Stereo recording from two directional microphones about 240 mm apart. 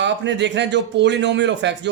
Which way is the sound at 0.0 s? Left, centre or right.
Right.